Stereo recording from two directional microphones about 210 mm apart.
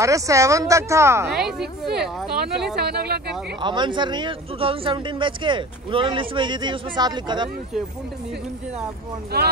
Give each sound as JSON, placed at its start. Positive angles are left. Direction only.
{"t": 0.0, "sound": "speech", "side_deg": -15}
{"t": 1.3, "sound": "speech", "side_deg": 0}
{"t": 2.7, "sound": "speech", "side_deg": -50}
{"t": 3.6, "sound": "speech", "side_deg": -20}
{"t": 9.3, "sound": "speech", "side_deg": -50}